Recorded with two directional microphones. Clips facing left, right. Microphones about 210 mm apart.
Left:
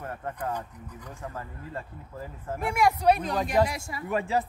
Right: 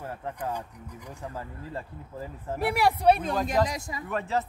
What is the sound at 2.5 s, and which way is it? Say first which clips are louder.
Speech: even; 35° right (ahead or behind).